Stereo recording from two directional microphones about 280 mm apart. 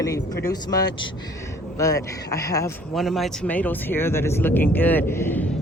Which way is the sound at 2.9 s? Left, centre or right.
Centre.